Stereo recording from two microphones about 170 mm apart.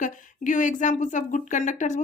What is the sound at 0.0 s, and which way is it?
Speech, 50° left (ahead or behind).